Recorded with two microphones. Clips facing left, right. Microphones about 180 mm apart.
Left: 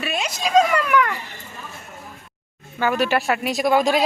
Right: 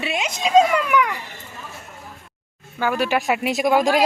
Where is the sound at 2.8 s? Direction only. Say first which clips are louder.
Left 1 dB; 10° right (ahead or behind).